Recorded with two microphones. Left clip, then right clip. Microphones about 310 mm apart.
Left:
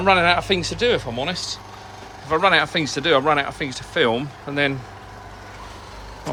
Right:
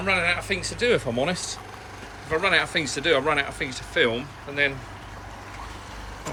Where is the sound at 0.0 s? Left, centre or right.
Centre.